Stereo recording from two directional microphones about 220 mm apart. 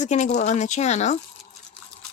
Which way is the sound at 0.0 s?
35° left (ahead or behind).